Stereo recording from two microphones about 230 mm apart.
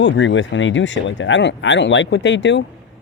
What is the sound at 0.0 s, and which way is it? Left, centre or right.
Speech, left.